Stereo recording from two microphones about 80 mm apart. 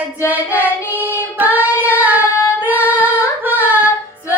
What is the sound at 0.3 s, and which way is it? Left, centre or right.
Child singing, right.